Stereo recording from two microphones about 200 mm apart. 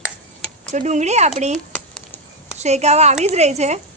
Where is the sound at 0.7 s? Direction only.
35° right (ahead or behind).